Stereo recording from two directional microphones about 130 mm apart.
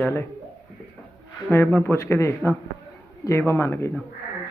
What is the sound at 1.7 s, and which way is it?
A man's voice, 15° left (ahead or behind).